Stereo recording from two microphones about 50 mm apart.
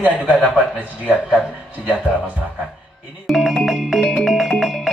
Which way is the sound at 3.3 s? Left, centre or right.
Centre.